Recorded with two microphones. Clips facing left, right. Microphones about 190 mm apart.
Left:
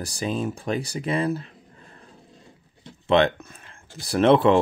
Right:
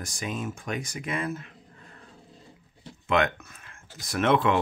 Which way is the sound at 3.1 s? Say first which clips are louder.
Left 6 dB; 30° left (ahead or behind).